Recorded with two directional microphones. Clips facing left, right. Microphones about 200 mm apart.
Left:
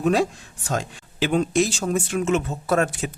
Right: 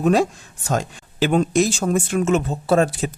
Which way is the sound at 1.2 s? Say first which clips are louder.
Right 3 dB; 45° right (ahead or behind).